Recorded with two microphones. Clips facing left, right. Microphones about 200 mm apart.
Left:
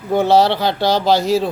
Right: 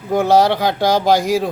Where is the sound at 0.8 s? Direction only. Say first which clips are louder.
Right 1 dB; 50° right (ahead or behind).